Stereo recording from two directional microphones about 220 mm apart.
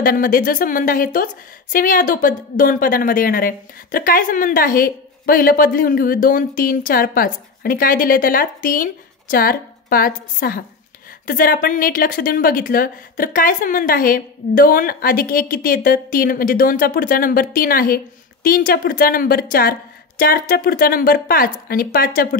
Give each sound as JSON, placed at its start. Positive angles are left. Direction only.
{"t": 0.0, "sound": "a woman's voice", "side_deg": 40}